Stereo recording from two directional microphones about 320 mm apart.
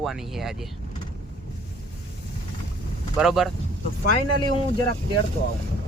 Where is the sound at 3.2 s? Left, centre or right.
Centre.